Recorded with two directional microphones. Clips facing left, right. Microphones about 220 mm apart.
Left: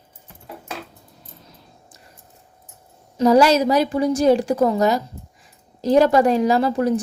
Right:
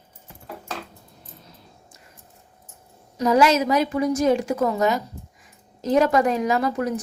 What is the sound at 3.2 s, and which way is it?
A woman's voice, 35° left (ahead or behind).